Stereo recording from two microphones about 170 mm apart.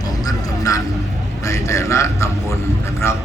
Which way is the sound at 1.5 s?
15° left (ahead or behind).